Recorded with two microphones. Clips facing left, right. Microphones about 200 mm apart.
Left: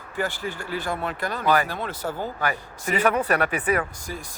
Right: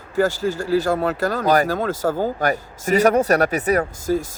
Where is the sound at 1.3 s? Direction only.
40° right (ahead or behind).